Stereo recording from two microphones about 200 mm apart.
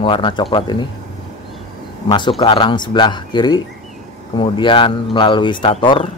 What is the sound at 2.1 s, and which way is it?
Speech, 25° left (ahead or behind).